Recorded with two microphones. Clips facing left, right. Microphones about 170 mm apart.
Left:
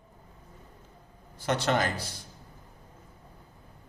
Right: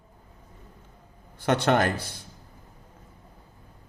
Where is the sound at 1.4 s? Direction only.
60° right (ahead or behind).